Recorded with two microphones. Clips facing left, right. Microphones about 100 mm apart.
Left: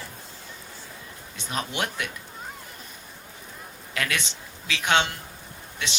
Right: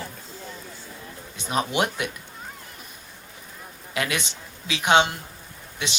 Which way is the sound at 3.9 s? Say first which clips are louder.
Right 2 dB; 20° right (ahead or behind).